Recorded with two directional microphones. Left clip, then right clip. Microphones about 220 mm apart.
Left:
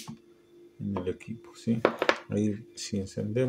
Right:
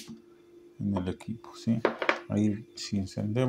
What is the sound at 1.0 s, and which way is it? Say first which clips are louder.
Speech: left 3 dB; 20° right (ahead or behind).